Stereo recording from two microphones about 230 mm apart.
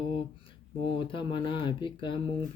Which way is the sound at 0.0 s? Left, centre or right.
Left.